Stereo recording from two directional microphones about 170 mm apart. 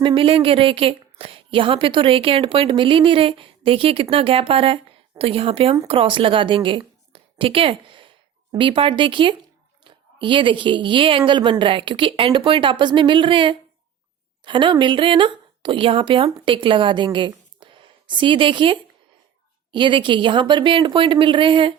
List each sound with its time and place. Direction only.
0.0 s a woman's voice: 30° right (ahead or behind)